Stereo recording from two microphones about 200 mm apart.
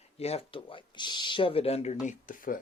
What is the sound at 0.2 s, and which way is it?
Speech, 30° left (ahead or behind).